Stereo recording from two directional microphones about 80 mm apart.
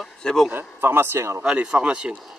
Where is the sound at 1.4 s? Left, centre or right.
Centre.